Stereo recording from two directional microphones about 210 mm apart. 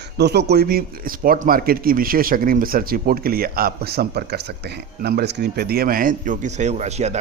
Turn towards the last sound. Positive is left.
turn(degrees=-30)  # may be behind; listen again after turning